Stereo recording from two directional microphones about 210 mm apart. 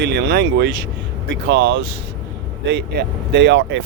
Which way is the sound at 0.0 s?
50° right (ahead or behind).